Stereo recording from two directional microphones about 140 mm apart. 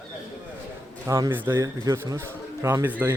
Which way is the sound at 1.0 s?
20° right (ahead or behind).